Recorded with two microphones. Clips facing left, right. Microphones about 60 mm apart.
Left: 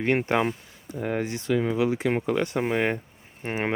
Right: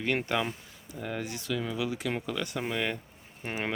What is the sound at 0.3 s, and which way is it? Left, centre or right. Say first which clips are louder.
Speech: left 6 dB; left.